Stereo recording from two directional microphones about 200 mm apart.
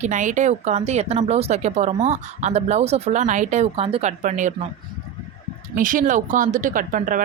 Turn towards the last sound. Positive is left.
turn(degrees=-40)  # may be behind; listen again after turning